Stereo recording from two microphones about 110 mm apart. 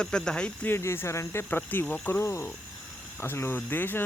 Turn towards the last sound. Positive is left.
turn(degrees=20)  # may be behind; listen again after turning